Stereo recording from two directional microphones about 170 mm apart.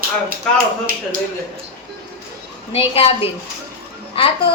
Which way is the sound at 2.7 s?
35° left (ahead or behind).